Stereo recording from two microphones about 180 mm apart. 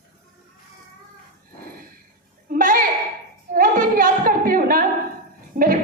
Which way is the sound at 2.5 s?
50° right (ahead or behind).